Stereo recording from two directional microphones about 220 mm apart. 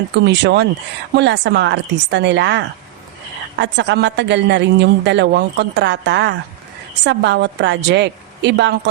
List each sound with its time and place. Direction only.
0.2 s a woman's voice: 50° right (ahead or behind)